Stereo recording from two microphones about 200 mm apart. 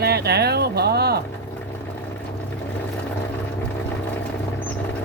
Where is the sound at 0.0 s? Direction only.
55° right (ahead or behind).